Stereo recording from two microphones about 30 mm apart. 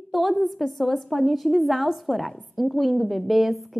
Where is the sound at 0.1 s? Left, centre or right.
Centre.